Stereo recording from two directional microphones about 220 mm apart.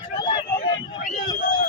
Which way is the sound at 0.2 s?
20° left (ahead or behind).